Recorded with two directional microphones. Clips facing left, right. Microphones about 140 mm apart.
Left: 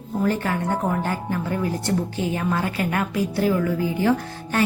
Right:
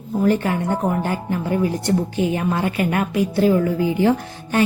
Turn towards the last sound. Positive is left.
turn(degrees=-15)  # may be behind; listen again after turning